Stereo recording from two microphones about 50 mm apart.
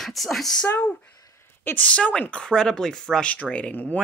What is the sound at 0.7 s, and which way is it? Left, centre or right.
Speech, left.